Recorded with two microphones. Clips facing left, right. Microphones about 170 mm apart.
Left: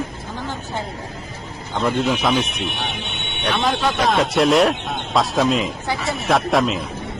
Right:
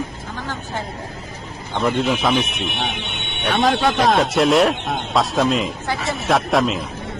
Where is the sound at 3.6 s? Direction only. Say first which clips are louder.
Right 4 dB; 75° right (ahead or behind).